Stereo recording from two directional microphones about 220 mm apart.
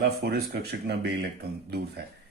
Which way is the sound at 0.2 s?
45° right (ahead or behind).